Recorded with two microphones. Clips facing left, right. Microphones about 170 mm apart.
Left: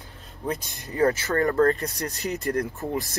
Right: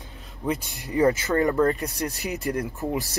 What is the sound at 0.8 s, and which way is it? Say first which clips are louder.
Speech: right 2 dB; 15° right (ahead or behind).